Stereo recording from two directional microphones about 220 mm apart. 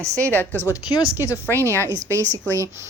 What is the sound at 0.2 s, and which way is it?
Speech, 10° left (ahead or behind).